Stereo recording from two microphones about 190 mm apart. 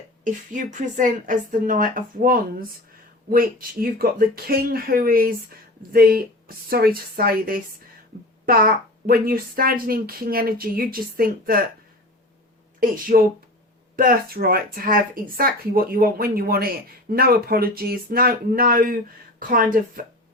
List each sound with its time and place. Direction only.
0.3 s speech: 45° right (ahead or behind)
12.8 s speech: 50° right (ahead or behind)